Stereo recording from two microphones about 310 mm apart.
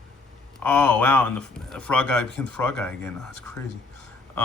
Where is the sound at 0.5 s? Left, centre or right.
Centre.